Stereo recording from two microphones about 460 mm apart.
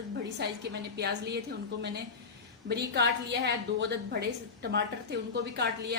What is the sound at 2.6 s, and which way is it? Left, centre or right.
A woman's voice, right.